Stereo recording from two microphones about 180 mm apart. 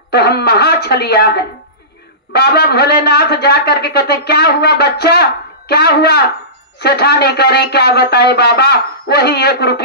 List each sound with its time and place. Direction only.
0.1 s speech: 65° left (ahead or behind)